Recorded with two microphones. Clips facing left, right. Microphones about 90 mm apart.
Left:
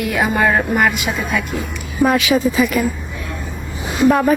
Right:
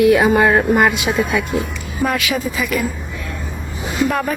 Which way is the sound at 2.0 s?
25° left (ahead or behind).